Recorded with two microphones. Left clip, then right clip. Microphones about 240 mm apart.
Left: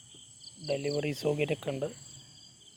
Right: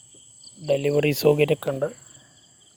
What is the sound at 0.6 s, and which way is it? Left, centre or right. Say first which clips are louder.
Speech: right 11 dB; right.